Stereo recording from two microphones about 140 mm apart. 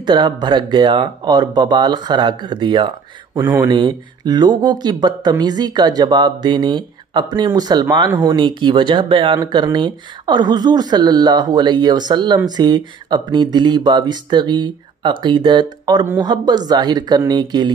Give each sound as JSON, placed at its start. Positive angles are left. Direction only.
{"t": 0.0, "sound": "speech", "side_deg": -30}
{"t": 3.3, "sound": "speech", "side_deg": -15}
{"t": 3.6, "sound": "speech", "side_deg": -35}